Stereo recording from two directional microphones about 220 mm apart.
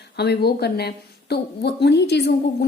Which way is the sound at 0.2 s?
45° left (ahead or behind).